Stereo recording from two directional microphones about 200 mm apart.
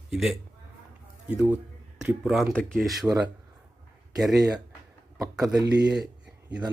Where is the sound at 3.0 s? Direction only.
15° right (ahead or behind).